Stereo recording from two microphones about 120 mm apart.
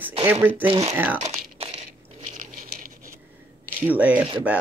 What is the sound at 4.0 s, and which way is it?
Speech, 10° right (ahead or behind).